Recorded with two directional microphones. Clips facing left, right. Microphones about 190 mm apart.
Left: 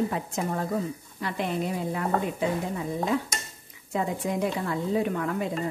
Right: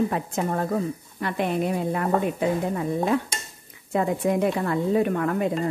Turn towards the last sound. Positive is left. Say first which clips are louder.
# right 5 dB
turn(degrees=-55)  # may be behind; listen again after turning